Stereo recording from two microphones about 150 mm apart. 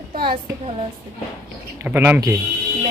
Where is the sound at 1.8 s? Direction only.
10° right (ahead or behind).